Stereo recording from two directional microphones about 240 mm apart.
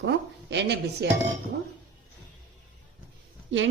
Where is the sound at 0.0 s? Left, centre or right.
Right.